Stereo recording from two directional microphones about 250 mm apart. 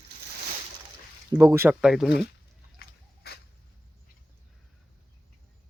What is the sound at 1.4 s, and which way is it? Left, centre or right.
Speech, centre.